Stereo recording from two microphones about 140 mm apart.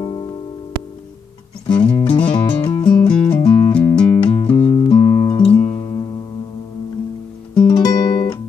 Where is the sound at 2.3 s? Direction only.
35° left (ahead or behind).